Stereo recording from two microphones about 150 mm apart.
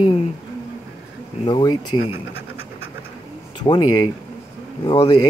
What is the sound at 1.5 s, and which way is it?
Speech, 25° left (ahead or behind).